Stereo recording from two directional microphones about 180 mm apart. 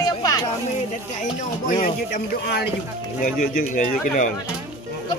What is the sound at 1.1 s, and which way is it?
Speech, 45° left (ahead or behind).